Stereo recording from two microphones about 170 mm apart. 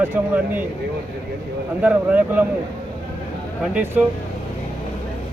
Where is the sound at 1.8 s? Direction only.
10° right (ahead or behind).